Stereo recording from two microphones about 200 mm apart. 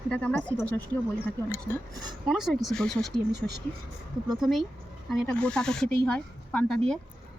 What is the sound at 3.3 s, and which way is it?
Speech, 55° right (ahead or behind).